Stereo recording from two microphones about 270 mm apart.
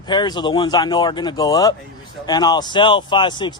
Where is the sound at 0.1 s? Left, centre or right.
Centre.